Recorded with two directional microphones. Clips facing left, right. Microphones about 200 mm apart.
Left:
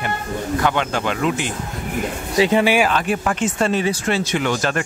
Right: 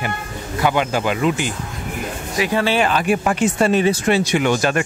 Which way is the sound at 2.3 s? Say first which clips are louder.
Left 3 dB; 20° left (ahead or behind).